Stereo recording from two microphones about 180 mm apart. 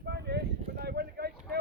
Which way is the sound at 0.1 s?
70° right (ahead or behind).